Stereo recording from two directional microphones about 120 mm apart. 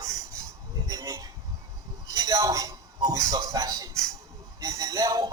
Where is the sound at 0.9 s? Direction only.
30° right (ahead or behind).